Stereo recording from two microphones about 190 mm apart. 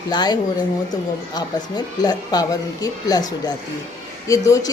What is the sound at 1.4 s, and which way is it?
A woman's voice, 20° left (ahead or behind).